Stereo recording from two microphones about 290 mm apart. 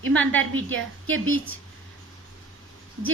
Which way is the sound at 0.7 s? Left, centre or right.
Right.